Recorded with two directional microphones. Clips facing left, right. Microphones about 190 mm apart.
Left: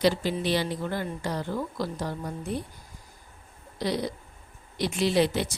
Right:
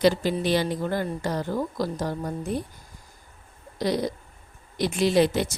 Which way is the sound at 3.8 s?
45° right (ahead or behind).